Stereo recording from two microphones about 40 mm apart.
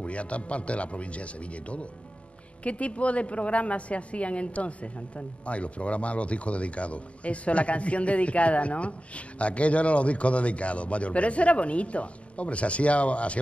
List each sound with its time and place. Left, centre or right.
0.0 s a woman's voice: left